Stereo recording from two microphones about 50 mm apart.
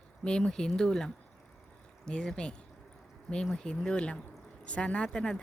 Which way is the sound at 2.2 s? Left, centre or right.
Centre.